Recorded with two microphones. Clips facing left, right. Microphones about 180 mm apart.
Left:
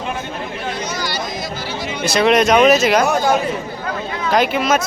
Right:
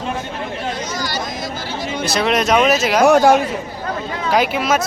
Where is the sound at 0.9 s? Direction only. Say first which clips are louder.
Even; 45° right (ahead or behind).